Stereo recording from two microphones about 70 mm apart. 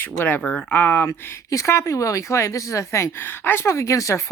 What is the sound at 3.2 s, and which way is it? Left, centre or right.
Speech, left.